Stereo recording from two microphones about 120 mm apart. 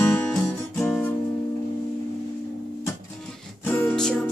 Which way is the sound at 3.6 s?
15° left (ahead or behind).